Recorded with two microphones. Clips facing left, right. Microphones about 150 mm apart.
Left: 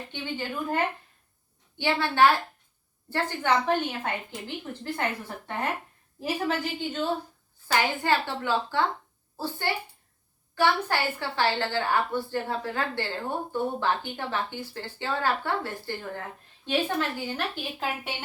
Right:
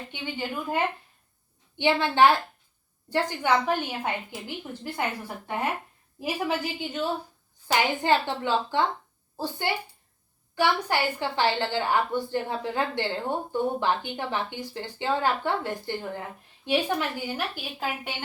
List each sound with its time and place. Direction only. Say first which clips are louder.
0.1 s a woman's voice: even; 10° right (ahead or behind)
1.8 s a woman's voice: right 2 dB; 20° right (ahead or behind)
6.1 s a woman's voice: even; 10° right (ahead or behind)